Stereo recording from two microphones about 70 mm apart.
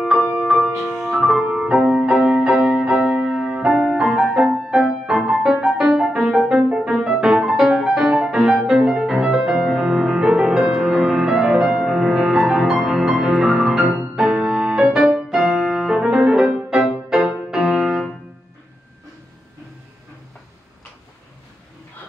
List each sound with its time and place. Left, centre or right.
0.0 s music: centre
13.5 s music: centre
13.9 s music: centre
16.0 s music: centre